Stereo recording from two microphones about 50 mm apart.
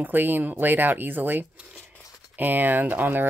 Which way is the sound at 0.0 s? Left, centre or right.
Right.